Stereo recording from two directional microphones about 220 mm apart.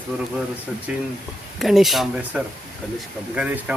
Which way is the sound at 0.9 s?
5° right (ahead or behind).